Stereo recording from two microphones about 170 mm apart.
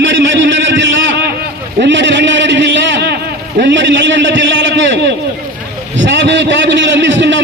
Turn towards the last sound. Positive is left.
turn(degrees=-90)